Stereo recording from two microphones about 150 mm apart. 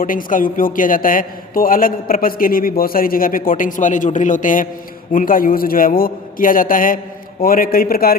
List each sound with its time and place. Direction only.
0.0 s a man's voice: 65° left (ahead or behind); by 8.1 s 85° left